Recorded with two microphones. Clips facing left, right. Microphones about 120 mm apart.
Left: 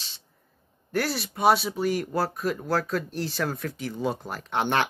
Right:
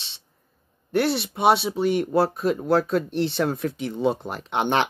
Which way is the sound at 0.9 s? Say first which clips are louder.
Right 5 dB; 25° right (ahead or behind).